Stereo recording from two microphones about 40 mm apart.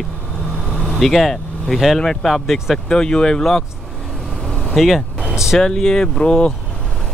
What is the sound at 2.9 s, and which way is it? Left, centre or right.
Speech, centre.